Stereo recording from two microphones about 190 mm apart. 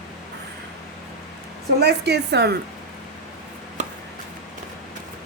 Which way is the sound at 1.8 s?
60° right (ahead or behind).